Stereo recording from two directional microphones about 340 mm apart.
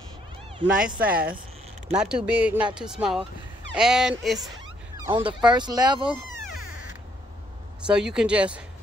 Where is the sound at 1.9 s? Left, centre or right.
Centre.